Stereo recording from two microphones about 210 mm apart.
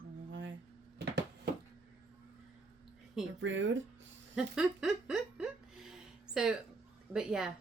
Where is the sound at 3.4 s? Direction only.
65° right (ahead or behind).